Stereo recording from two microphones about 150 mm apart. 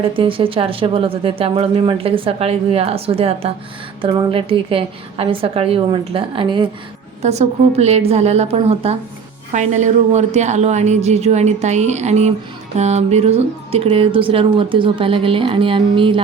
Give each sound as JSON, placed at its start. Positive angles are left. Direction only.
{"t": 0.2, "sound": "speech", "side_deg": -35}
{"t": 7.2, "sound": "speech", "side_deg": -45}
{"t": 9.5, "sound": "speech", "side_deg": -55}